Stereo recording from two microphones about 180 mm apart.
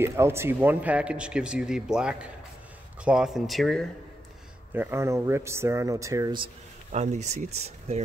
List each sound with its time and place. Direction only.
0.0 s speech: 15° right (ahead or behind); by 3.8 s centre (ahead or behind)
4.7 s speech: 15° right (ahead or behind)
6.9 s speech: 40° right (ahead or behind)